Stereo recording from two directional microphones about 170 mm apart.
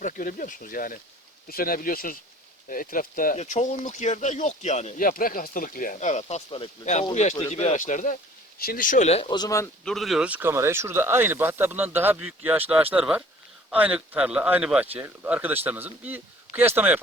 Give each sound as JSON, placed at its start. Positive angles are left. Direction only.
{"t": 0.0, "sound": "speech", "side_deg": 50}
{"t": 8.5, "sound": "speech", "side_deg": 60}
{"t": 9.8, "sound": "speech", "side_deg": 0}